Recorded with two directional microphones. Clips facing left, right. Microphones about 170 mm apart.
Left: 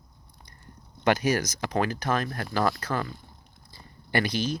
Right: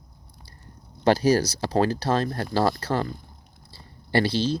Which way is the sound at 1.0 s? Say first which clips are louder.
Right 5 dB; 30° right (ahead or behind).